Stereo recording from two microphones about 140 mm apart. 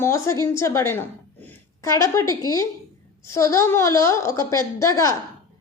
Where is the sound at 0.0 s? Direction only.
20° left (ahead or behind).